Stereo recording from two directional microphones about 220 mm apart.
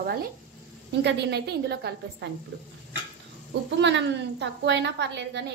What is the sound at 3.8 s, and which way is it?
A woman's voice, 50° right (ahead or behind).